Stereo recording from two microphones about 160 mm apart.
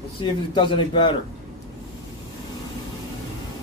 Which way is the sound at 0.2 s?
30° left (ahead or behind).